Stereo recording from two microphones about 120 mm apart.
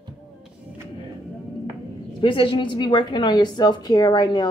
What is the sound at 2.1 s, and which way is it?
A woman's voice, 45° left (ahead or behind).